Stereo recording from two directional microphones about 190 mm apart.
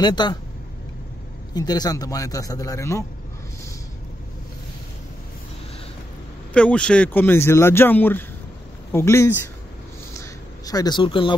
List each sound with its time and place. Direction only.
0.0 s speech: 20° left (ahead or behind)
1.5 s speech: 20° left (ahead or behind)
6.5 s speech: 5° left (ahead or behind)
10.1 s a sound: 20° left (ahead or behind)